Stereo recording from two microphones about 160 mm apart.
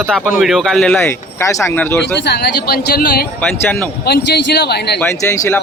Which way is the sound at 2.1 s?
90° left.